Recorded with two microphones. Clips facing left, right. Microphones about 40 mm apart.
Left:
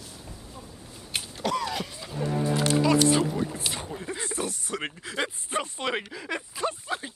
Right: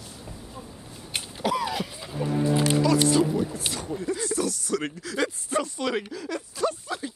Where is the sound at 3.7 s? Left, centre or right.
Left.